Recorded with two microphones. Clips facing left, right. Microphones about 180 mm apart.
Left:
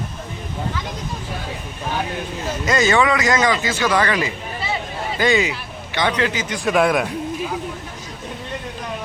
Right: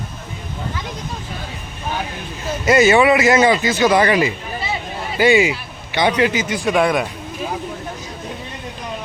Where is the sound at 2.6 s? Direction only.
25° right (ahead or behind).